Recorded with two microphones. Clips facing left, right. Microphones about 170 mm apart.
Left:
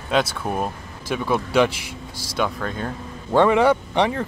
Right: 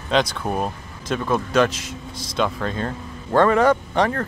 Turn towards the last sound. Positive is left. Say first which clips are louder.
# even
turn(degrees=10)  # may be behind; listen again after turning